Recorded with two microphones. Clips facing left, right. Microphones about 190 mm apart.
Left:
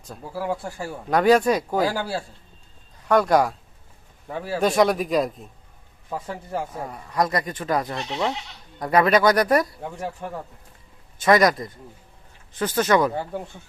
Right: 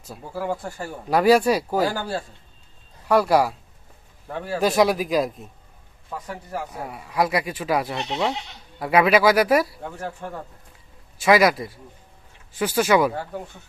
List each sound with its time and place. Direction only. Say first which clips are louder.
0.1 s speech: even; centre (ahead or behind)
1.1 s speech: right 1 dB; 10° right (ahead or behind)
1.8 s speech: even; 10° left (ahead or behind)
3.1 s speech: even; 5° right (ahead or behind)
6.1 s a man's voice: left 2 dB; 30° left (ahead or behind)
6.8 s speech: right 3 dB; 5° right (ahead or behind)
7.9 s speech: right 1 dB; 20° right (ahead or behind)
8.8 s speech: right 1 dB; 5° right (ahead or behind)
10.2 s speech: left 1 dB; 10° left (ahead or behind)
11.2 s speech: even; 5° right (ahead or behind)